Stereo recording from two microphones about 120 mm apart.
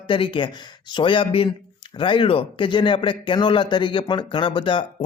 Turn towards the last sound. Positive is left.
turn(degrees=45)  # may be behind; listen again after turning